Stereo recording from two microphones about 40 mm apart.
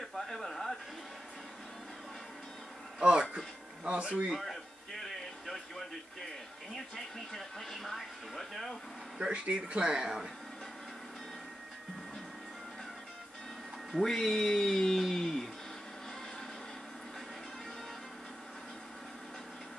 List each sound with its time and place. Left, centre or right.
0.0 s a sound: centre
3.0 s speech: right
4.4 s a sound: centre
7.3 s speech: centre
9.2 s speech: right
14.0 s speech: centre